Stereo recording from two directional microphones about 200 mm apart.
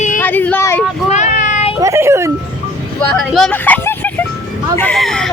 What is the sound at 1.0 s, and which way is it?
Child singing, 35° left (ahead or behind).